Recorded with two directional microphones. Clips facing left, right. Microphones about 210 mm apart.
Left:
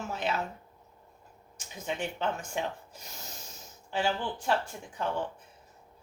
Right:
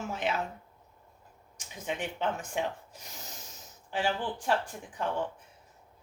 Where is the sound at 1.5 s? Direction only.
15° right (ahead or behind).